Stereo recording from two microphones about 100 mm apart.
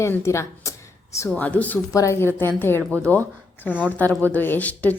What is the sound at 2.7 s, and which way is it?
Speech, 25° right (ahead or behind).